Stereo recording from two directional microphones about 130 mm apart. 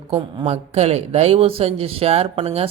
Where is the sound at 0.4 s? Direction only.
55° right (ahead or behind).